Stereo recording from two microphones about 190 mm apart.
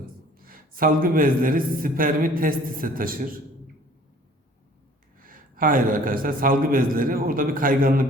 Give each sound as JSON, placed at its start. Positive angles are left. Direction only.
{"t": 0.3, "sound": "a man's voice", "side_deg": -50}
{"t": 5.2, "sound": "a man's voice", "side_deg": -45}